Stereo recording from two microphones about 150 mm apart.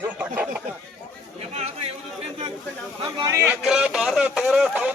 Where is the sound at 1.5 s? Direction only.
45° right (ahead or behind).